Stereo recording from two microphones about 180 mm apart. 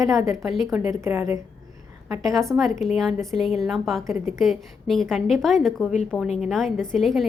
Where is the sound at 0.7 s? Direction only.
15° right (ahead or behind).